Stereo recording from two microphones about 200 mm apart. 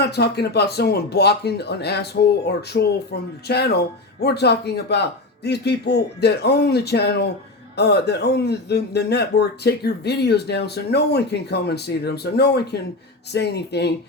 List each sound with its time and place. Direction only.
0.1 s speech: 55° left (ahead or behind)